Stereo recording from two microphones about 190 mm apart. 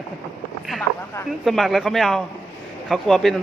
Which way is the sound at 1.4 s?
Centre (ahead or behind).